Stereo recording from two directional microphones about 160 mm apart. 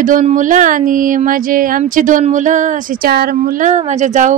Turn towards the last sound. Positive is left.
turn(degrees=-50)  # may be behind; listen again after turning